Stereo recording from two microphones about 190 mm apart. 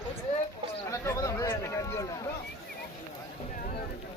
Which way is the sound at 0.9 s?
15° left (ahead or behind).